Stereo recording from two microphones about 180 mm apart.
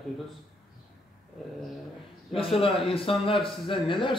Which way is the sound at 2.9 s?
30° left (ahead or behind).